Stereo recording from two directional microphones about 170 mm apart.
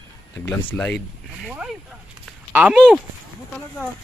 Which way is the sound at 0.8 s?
5° left (ahead or behind).